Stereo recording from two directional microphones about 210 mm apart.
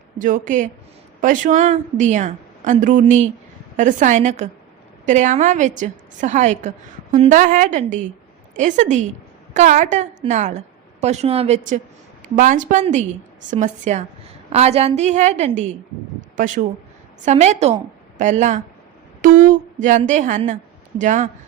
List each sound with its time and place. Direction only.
0.2 s a woman's voice: 40° right (ahead or behind)
19.2 s a sound: 40° right (ahead or behind)
20.1 s a woman's voice: 35° right (ahead or behind)